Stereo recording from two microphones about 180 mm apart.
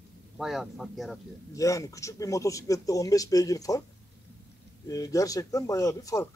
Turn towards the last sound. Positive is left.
turn(degrees=20)  # may be behind; listen again after turning